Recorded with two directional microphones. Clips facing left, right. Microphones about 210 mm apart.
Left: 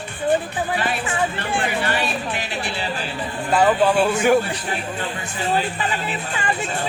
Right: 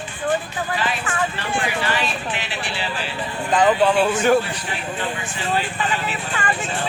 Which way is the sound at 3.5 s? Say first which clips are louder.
Even; 5° left (ahead or behind).